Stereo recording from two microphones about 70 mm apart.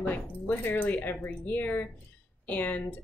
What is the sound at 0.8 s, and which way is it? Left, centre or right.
A woman's voice, centre.